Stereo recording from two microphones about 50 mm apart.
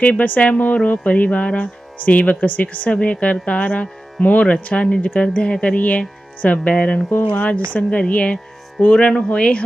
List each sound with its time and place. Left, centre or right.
0.0 s speech: left